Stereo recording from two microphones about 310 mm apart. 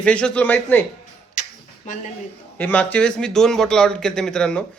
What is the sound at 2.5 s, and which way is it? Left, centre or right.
Speech, centre.